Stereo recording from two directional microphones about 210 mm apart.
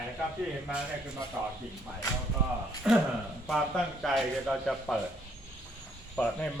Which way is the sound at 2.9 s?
Centre (ahead or behind).